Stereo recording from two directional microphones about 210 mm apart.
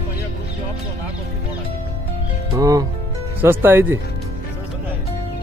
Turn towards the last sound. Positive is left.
turn(degrees=-10)  # may be behind; listen again after turning